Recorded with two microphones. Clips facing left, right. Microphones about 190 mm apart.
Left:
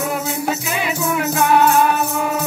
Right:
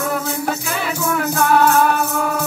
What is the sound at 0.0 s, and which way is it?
Music, 15° left (ahead or behind).